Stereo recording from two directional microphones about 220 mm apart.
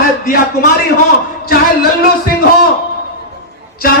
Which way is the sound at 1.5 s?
45° left (ahead or behind).